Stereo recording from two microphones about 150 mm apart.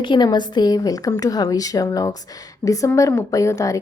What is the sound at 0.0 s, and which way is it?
A woman's voice, 30° left (ahead or behind).